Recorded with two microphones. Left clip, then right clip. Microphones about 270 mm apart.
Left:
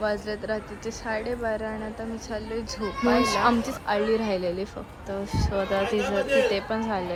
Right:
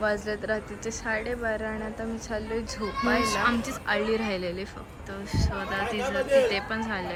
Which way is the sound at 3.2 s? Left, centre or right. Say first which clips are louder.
Left 3 dB; left.